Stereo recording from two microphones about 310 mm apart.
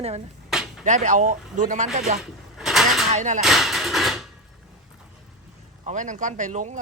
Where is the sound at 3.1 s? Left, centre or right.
Right.